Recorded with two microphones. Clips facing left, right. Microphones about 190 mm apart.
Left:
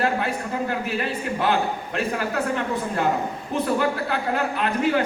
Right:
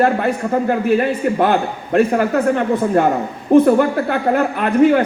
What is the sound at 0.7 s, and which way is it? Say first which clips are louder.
A man's voice: right 11 dB; 55° right (ahead or behind).